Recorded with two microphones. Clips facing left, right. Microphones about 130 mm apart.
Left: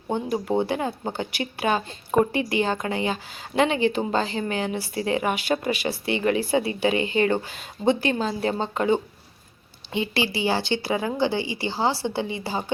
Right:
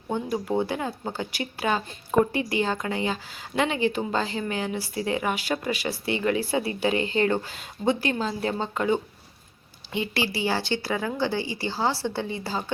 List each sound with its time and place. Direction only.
0.1 s speech: 20° left (ahead or behind)